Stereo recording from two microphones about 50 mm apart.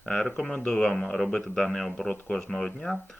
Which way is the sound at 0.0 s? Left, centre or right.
Centre.